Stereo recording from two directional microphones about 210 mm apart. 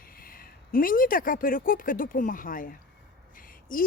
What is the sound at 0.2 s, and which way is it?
Speech, 45° left (ahead or behind).